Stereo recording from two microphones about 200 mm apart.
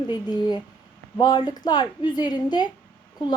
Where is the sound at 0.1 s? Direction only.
20° left (ahead or behind).